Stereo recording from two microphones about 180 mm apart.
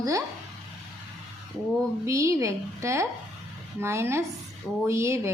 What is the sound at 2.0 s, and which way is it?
A woman's voice, 15° right (ahead or behind).